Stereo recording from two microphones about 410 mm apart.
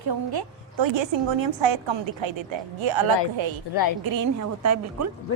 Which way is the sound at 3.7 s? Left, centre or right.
Left.